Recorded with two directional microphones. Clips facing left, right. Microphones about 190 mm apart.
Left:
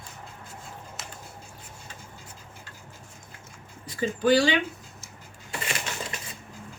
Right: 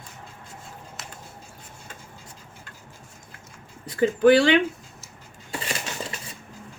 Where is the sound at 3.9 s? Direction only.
55° right (ahead or behind).